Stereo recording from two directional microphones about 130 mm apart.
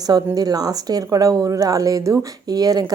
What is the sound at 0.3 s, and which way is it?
Speech, 30° right (ahead or behind).